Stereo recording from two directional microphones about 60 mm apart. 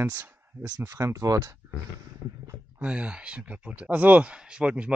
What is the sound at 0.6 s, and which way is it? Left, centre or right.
Speech, right.